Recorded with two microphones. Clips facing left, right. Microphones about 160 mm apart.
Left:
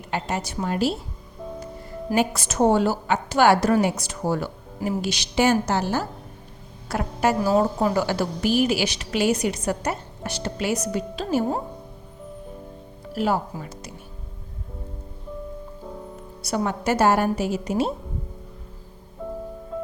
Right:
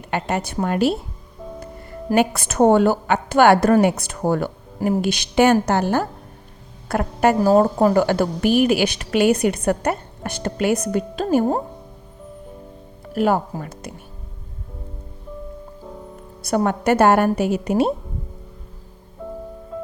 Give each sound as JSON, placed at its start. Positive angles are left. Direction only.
{"t": 0.1, "sound": "a woman's voice", "side_deg": -60}
{"t": 2.1, "sound": "a woman's voice", "side_deg": -60}
{"t": 13.1, "sound": "a woman's voice", "side_deg": -55}
{"t": 16.4, "sound": "a woman's voice", "side_deg": -50}